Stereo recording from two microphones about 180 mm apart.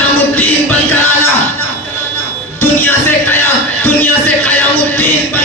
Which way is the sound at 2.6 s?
10° left (ahead or behind).